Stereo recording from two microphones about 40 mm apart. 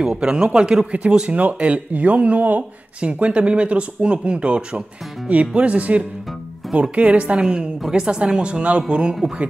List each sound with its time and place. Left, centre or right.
0.0 s speech: right
1.3 s speech: right
3.0 s speech: right